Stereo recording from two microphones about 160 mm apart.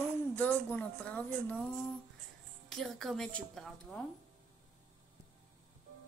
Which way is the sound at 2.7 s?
Centre (ahead or behind).